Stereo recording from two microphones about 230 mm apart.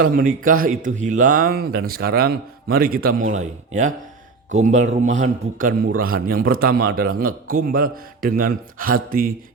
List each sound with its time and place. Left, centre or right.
0.0 s a man's voice: right